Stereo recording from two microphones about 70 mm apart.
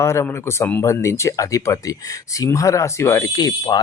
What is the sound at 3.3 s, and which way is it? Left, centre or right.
Speech, left.